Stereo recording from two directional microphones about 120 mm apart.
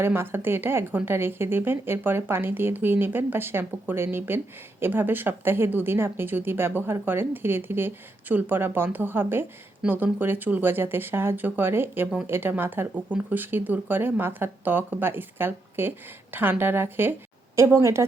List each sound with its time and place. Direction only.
0.0 s a woman's voice: 20° right (ahead or behind)